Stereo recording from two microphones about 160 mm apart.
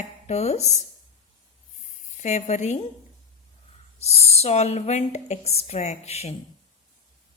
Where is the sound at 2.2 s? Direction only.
45° left (ahead or behind).